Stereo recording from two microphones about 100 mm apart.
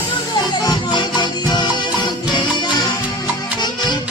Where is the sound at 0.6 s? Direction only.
45° left (ahead or behind).